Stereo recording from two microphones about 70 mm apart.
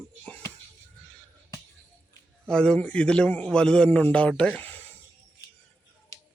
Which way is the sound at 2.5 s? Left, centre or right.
Centre.